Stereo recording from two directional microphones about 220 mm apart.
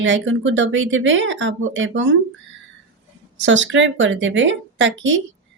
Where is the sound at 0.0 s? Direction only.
60° right (ahead or behind).